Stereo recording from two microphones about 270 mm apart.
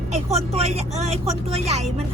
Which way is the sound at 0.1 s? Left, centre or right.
Right.